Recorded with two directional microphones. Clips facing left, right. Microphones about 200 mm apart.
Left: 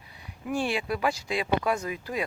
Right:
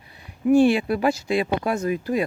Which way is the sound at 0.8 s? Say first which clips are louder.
Right 6 dB; 50° right (ahead or behind).